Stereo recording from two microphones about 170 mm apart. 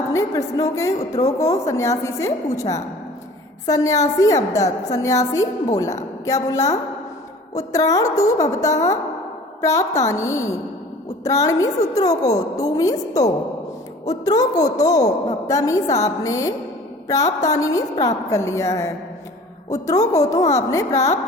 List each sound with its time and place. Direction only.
0.1 s a woman's voice: 20° left (ahead or behind)